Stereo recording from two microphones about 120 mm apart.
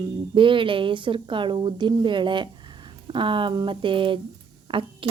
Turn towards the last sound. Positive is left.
turn(degrees=-45)  # may be behind; listen again after turning